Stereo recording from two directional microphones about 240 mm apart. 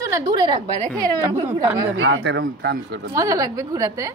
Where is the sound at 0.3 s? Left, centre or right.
Centre.